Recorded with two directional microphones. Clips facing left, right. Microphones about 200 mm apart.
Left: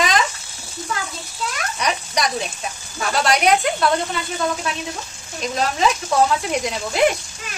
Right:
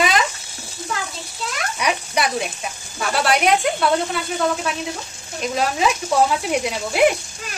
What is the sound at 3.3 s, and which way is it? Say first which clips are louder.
Speech: even; 5° right (ahead or behind).